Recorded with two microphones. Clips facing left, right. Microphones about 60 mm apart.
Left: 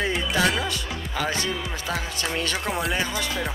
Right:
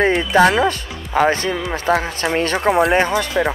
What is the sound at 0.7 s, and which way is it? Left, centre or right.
Speech, right.